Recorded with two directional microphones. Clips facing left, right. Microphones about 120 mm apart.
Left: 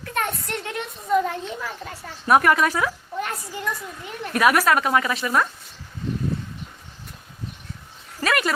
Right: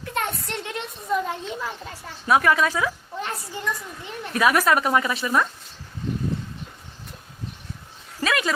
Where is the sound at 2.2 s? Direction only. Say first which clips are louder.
Left 2 dB; 10° left (ahead or behind).